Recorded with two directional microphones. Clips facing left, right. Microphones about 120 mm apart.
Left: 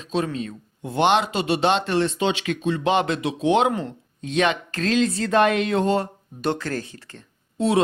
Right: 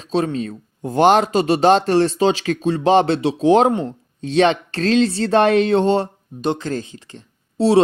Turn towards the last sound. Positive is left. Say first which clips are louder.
# right 6 dB
turn(degrees=-35)  # may be behind; listen again after turning